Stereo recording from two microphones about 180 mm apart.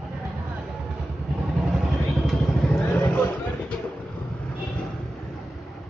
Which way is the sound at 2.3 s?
5° left (ahead or behind).